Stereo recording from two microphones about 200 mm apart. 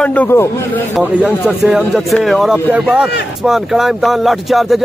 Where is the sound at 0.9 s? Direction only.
5° right (ahead or behind).